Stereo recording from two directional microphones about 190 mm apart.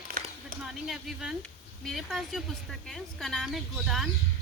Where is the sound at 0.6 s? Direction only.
Centre (ahead or behind).